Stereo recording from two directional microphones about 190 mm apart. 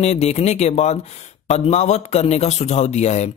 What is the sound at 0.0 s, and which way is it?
A man's voice, 35° left (ahead or behind).